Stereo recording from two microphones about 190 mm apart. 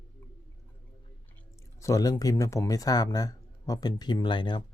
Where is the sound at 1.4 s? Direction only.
15° left (ahead or behind).